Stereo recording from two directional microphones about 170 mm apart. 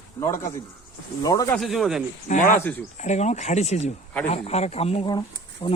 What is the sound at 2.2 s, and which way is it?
Speech, 45° left (ahead or behind).